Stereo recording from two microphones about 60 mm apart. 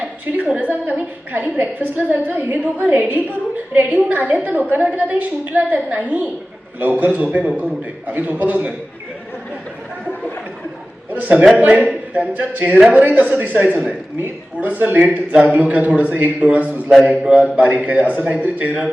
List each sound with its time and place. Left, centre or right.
0.3 s a woman's voice: right
11.1 s a man's voice: right